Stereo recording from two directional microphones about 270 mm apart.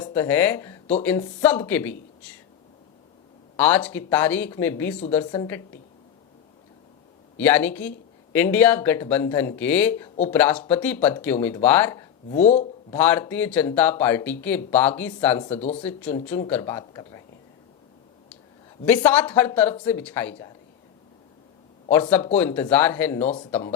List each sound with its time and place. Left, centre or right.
0.0 s speech: centre
3.6 s speech: centre
7.3 s speech: centre
12.3 s speech: left
12.9 s speech: centre
15.4 s speech: left
15.8 s speech: centre
18.9 s speech: centre
22.4 s speech: centre
23.2 s speech: centre